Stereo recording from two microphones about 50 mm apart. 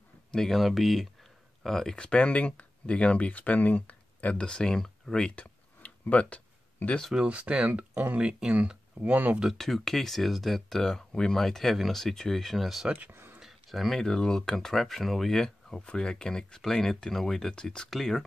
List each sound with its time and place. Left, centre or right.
0.3 s speech: centre
2.0 s speech: left
5.3 s a sound: left
7.2 s speech: right
8.2 s speech: centre
9.6 s speech: centre
12.9 s speech: right
13.4 s speech: centre
15.8 s speech: centre